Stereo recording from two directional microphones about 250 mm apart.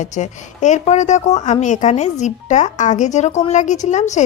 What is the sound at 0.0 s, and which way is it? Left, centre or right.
A woman's voice, left.